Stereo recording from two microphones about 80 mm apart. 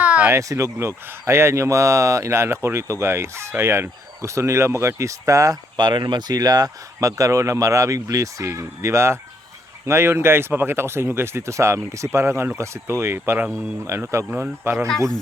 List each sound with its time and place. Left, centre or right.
0.0 s a sound: centre
0.3 s speech: right
5.7 s speech: right
14.3 s speech: right